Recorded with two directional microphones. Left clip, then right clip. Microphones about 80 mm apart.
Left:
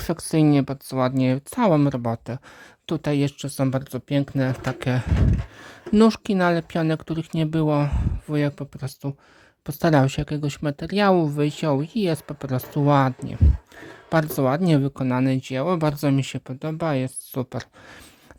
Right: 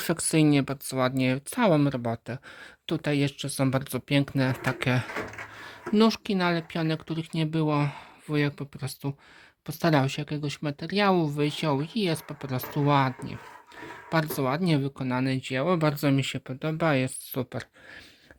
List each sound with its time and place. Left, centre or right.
0.0 s speech: left
3.6 s speech: centre
4.4 s speech: left
5.9 s speech: left
7.8 s speech: left
9.6 s speech: left
14.1 s speech: left